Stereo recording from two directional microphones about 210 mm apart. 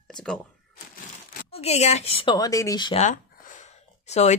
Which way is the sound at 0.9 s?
45° left (ahead or behind).